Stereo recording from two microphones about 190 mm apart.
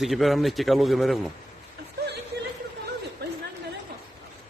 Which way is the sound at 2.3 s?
60° right (ahead or behind).